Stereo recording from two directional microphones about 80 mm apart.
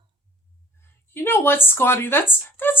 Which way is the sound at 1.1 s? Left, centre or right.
Left.